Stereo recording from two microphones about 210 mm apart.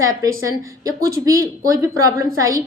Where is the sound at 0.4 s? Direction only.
15° right (ahead or behind).